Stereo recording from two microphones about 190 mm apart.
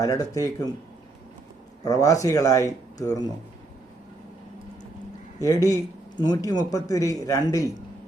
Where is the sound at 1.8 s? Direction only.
20° left (ahead or behind).